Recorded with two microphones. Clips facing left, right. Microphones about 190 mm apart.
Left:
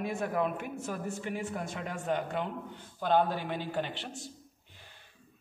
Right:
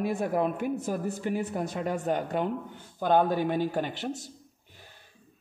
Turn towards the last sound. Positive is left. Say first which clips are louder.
# right 5 dB
turn(degrees=-45)  # may be behind; listen again after turning